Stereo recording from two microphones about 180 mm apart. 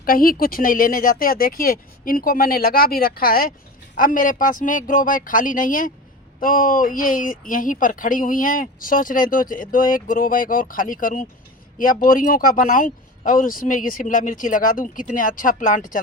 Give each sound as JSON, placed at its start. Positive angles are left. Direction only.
{"t": 0.0, "sound": "speech", "side_deg": 55}